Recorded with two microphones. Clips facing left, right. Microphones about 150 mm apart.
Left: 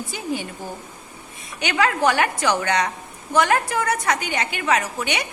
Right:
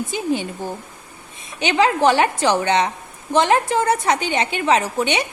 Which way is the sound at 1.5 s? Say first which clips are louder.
Right 4 dB; 20° right (ahead or behind).